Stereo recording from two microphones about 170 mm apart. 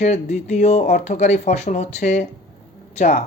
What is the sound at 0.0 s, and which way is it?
Speech, 45° left (ahead or behind).